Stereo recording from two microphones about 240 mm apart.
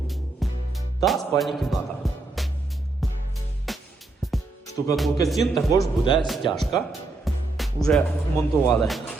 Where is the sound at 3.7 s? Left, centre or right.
Centre.